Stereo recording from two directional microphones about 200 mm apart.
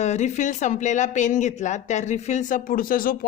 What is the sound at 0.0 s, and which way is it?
A woman's voice, 35° left (ahead or behind).